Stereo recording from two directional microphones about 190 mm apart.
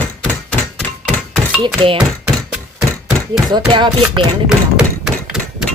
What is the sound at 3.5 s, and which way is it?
Speech, 25° right (ahead or behind).